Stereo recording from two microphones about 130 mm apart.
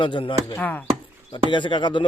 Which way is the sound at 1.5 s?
40° left (ahead or behind).